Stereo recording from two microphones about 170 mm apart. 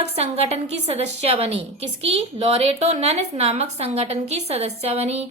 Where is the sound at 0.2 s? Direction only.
40° right (ahead or behind).